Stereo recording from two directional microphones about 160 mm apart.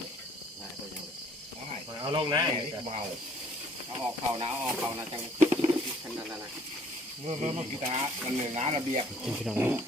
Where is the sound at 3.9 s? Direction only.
25° right (ahead or behind).